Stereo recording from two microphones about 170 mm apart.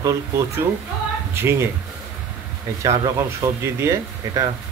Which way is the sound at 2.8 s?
20° right (ahead or behind).